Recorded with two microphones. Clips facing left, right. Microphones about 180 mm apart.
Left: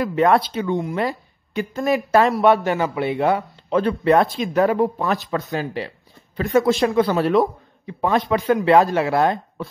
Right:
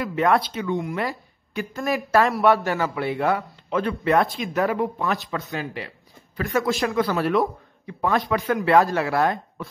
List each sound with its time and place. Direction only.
0.1 s speech: 30° left (ahead or behind)